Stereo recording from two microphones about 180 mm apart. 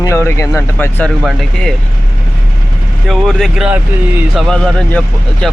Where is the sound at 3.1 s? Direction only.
Centre (ahead or behind).